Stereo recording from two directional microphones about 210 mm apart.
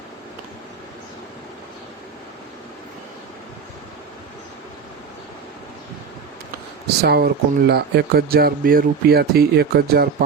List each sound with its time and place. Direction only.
6.8 s speech: 50° right (ahead or behind)